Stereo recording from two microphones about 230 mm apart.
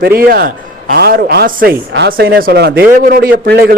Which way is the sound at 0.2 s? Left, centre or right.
Right.